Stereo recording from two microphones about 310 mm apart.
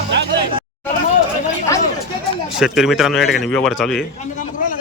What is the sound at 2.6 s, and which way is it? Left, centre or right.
A man's voice, centre.